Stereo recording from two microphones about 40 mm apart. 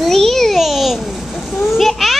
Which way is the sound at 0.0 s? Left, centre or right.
Centre.